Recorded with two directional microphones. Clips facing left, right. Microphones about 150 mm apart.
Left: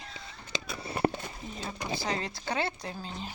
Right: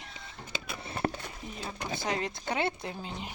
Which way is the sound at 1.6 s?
20° left (ahead or behind).